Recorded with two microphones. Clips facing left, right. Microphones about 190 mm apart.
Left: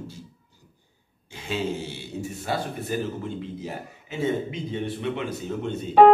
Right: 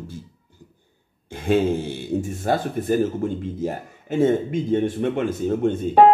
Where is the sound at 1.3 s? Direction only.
55° right (ahead or behind).